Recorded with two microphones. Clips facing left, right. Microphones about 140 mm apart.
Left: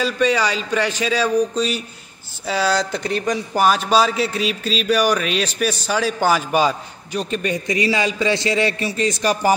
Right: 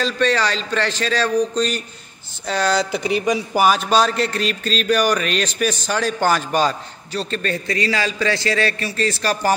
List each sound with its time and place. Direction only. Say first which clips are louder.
0.0 s a man's voice: left 1 dB; 10° left (ahead or behind)